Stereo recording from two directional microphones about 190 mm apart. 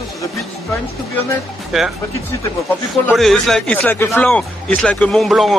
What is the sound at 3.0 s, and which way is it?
Speech, 5° left (ahead or behind).